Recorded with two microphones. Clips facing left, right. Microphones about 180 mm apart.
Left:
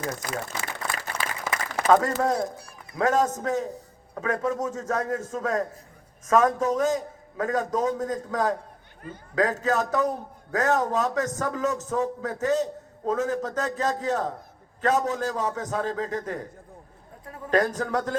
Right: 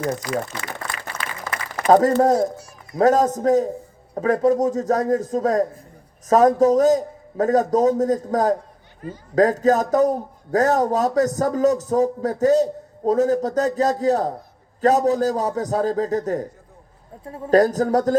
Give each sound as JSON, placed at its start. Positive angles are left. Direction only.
{"t": 1.1, "sound": "a sound", "side_deg": 10}
{"t": 1.9, "sound": "a man's voice", "side_deg": -40}
{"t": 17.2, "sound": "a man's voice", "side_deg": -30}